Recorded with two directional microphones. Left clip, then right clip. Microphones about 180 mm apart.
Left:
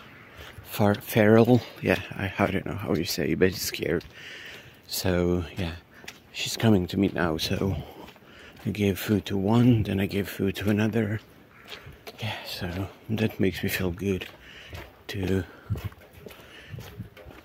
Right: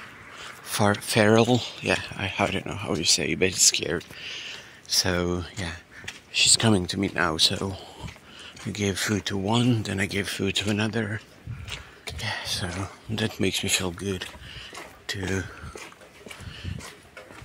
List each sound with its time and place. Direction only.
0.7 s a sound: 25° left (ahead or behind)
1.0 s speech: 25° left (ahead or behind)
6.3 s speech: 15° left (ahead or behind)
7.2 s speech: 30° left (ahead or behind)
10.9 s speech: 45° left (ahead or behind)
12.4 s speech: 15° left (ahead or behind)
12.8 s speech: 35° left (ahead or behind)